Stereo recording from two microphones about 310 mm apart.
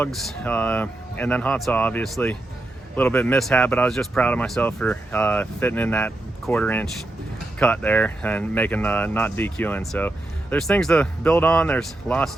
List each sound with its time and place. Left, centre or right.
0.0 s speech: centre